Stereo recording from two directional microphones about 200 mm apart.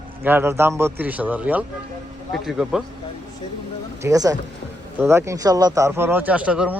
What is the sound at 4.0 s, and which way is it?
Speech, 15° right (ahead or behind).